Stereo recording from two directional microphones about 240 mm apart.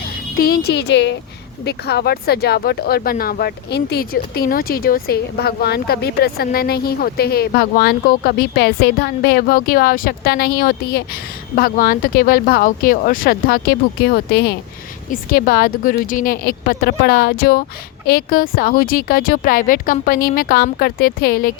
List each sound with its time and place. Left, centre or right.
0.0 s speech: left